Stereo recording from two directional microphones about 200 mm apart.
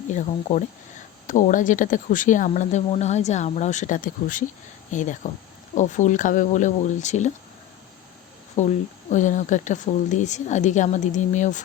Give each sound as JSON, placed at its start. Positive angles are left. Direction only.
{"t": 0.1, "sound": "speech", "side_deg": 40}
{"t": 8.6, "sound": "speech", "side_deg": 35}